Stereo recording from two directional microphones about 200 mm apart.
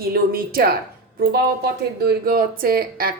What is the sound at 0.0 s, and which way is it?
A woman's voice, 50° right (ahead or behind).